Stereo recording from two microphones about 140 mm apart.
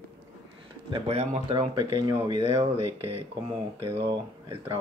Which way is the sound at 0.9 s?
45° right (ahead or behind).